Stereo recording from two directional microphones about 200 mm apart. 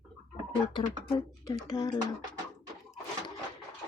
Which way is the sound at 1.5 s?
20° left (ahead or behind).